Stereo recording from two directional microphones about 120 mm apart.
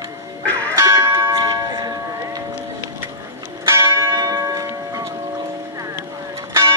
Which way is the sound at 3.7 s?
25° right (ahead or behind).